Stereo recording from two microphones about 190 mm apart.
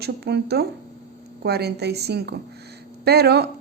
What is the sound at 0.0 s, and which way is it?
A woman's voice, 60° right (ahead or behind).